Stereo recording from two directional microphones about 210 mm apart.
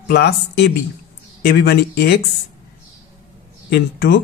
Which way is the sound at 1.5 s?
50° left (ahead or behind).